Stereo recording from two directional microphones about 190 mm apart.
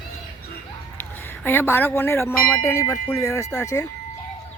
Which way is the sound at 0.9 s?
10° left (ahead or behind).